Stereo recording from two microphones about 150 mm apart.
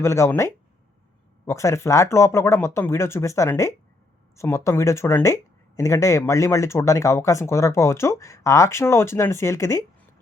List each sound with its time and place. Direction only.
0.0 s speech: 20° left (ahead or behind)